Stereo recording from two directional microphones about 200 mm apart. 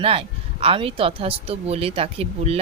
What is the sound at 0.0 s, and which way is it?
Speech, 30° right (ahead or behind).